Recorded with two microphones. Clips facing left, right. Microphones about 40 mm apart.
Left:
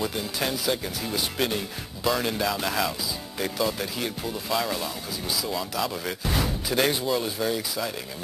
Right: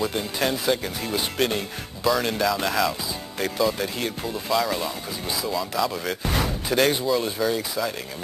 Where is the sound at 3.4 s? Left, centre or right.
Centre.